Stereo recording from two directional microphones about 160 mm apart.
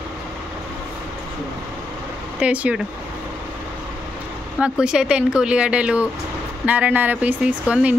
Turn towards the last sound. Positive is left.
turn(degrees=-5)  # may be behind; listen again after turning